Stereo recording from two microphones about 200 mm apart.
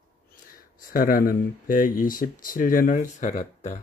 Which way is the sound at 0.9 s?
45° left (ahead or behind).